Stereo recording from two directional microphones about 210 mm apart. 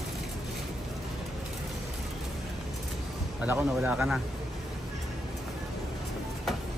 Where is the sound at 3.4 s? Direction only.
5° right (ahead or behind).